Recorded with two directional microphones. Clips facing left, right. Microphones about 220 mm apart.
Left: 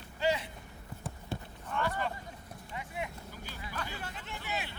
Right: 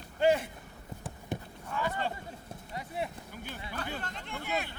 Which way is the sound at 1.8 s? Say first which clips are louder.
Right 1 dB; 25° right (ahead or behind).